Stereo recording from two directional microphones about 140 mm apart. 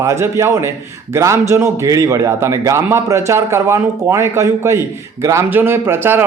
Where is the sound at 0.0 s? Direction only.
20° right (ahead or behind).